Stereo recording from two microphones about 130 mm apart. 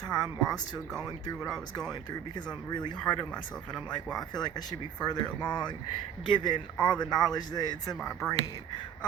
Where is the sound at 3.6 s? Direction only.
5° left (ahead or behind).